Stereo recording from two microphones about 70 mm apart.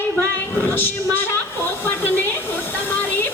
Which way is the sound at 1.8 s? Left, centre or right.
Left.